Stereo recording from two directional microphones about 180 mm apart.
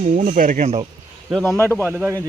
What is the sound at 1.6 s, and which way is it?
Speech, 15° left (ahead or behind).